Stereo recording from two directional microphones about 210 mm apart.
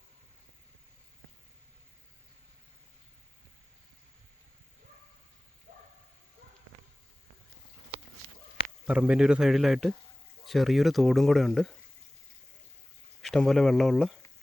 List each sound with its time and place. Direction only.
5.7 s a sound: 35° right (ahead or behind)
8.9 s speech: 5° right (ahead or behind)
13.2 s speech: centre (ahead or behind)